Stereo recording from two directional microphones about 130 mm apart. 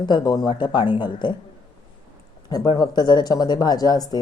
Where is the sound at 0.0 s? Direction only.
35° left (ahead or behind).